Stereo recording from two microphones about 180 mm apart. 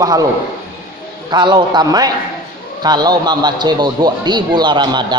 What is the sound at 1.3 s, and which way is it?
A man's voice, 25° right (ahead or behind).